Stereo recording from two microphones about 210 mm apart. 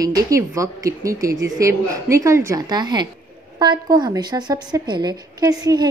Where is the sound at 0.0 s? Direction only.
15° right (ahead or behind).